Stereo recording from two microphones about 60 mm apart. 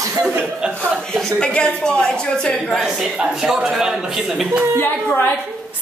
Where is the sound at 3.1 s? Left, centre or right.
Centre.